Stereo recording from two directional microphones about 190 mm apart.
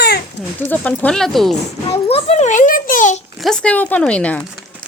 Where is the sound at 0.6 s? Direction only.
10° left (ahead or behind).